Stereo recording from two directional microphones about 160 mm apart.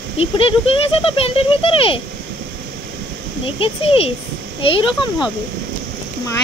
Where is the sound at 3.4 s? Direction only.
35° left (ahead or behind).